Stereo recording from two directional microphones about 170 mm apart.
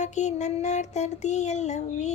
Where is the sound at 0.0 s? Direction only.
45° left (ahead or behind).